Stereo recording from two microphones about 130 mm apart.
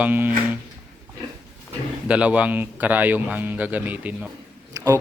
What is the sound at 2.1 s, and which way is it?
A man's voice, 10° right (ahead or behind).